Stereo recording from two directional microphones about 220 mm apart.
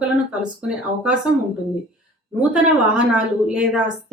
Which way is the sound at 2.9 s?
5° right (ahead or behind).